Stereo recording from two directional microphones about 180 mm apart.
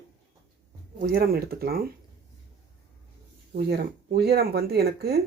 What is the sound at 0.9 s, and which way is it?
Speech, 55° right (ahead or behind).